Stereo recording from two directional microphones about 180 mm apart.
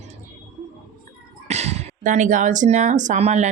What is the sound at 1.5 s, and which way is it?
Speech, 40° right (ahead or behind).